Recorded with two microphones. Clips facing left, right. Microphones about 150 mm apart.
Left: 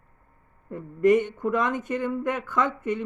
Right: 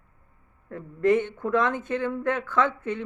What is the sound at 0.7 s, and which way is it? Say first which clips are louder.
Speech: left 2 dB; 15° left (ahead or behind).